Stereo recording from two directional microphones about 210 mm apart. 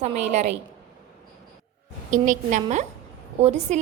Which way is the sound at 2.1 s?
35° right (ahead or behind).